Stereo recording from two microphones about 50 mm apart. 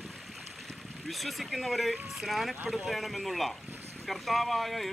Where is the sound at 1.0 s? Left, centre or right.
Centre.